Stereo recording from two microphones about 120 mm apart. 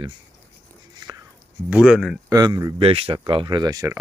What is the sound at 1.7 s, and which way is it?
Speech, 10° right (ahead or behind).